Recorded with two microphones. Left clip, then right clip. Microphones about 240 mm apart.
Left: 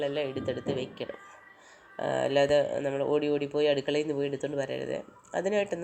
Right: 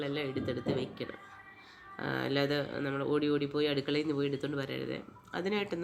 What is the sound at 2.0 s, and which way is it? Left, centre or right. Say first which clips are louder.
Speech: left 7 dB; right.